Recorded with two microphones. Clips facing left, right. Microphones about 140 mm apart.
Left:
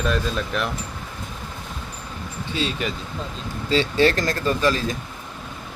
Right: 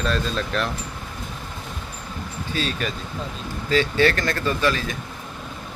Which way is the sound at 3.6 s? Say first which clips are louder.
Left 1 dB; 30° left (ahead or behind).